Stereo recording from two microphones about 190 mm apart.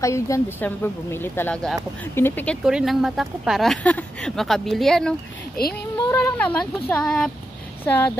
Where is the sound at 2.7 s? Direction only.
Centre (ahead or behind).